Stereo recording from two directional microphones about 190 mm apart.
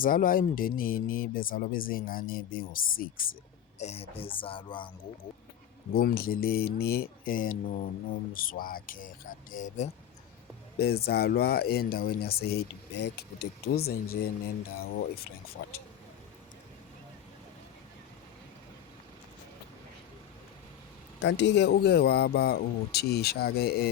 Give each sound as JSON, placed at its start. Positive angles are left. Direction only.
{"t": 0.0, "sound": "speech", "side_deg": 45}
{"t": 3.8, "sound": "speech", "side_deg": 35}
{"t": 5.9, "sound": "speech", "side_deg": 55}
{"t": 10.8, "sound": "speech", "side_deg": 55}
{"t": 21.2, "sound": "speech", "side_deg": 70}